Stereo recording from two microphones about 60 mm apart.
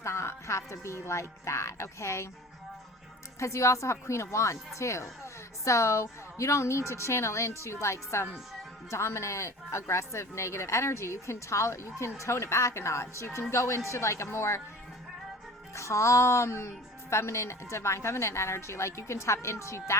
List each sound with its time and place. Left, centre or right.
0.0 s speech: left
3.4 s speech: left
15.7 s speech: left